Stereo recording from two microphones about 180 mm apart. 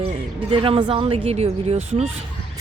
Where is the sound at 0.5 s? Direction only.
30° right (ahead or behind).